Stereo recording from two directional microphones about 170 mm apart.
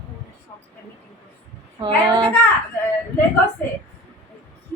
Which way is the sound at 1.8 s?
30° right (ahead or behind).